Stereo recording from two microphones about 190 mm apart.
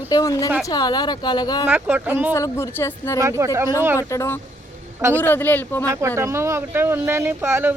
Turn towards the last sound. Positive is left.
turn(degrees=-10)  # may be behind; listen again after turning